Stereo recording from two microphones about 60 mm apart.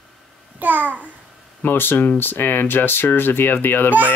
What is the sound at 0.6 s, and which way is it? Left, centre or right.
Babbling, right.